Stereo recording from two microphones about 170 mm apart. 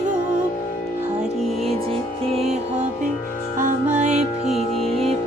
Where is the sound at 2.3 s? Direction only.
40° right (ahead or behind).